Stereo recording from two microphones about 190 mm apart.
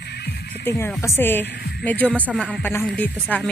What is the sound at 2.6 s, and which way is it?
Speech, 10° left (ahead or behind).